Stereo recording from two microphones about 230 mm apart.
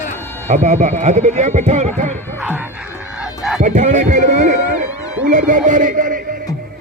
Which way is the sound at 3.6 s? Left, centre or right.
Right.